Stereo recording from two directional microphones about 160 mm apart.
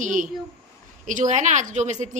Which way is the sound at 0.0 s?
55° right (ahead or behind).